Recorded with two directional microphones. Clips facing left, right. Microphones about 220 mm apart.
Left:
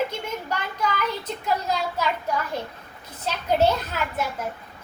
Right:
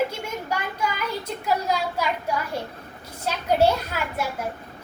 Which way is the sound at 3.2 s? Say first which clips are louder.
Right 1 dB; 10° right (ahead or behind).